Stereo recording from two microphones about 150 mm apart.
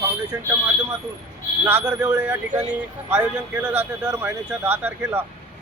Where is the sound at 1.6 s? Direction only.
15° right (ahead or behind).